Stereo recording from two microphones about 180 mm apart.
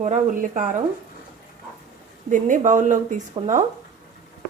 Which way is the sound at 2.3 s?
45° right (ahead or behind).